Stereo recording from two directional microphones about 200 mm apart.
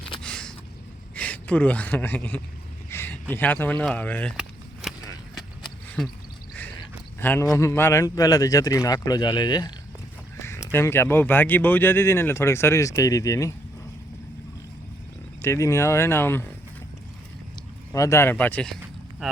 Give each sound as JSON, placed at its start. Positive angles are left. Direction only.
{"t": 0.2, "sound": "a sound", "side_deg": 5}
{"t": 1.1, "sound": "speech", "side_deg": 5}
{"t": 4.4, "sound": "a sound", "side_deg": -5}
{"t": 7.2, "sound": "speech", "side_deg": 10}
{"t": 15.4, "sound": "speech", "side_deg": 15}
{"t": 17.9, "sound": "speech", "side_deg": 15}